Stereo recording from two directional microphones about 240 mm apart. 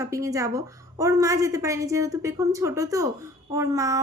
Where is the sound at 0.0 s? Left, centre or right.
Centre.